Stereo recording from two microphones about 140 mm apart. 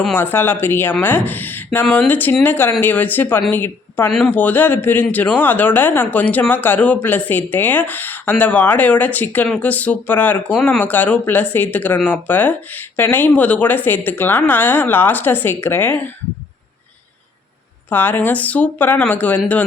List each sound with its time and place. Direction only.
0.1 s a woman's voice: 15° left (ahead or behind)
17.8 s speech: 15° left (ahead or behind)